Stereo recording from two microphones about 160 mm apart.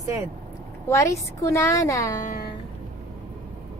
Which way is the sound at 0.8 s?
20° left (ahead or behind).